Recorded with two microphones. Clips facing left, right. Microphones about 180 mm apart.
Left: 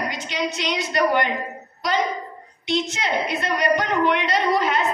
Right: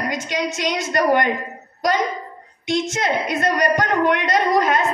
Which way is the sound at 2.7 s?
50° right (ahead or behind).